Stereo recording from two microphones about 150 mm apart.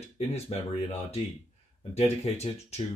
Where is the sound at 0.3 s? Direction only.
45° left (ahead or behind).